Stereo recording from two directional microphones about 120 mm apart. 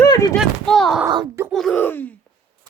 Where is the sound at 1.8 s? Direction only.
15° left (ahead or behind).